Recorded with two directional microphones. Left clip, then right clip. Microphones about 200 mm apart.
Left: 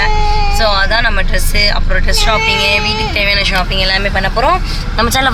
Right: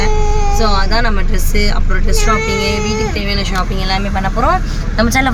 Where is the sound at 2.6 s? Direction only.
10° right (ahead or behind).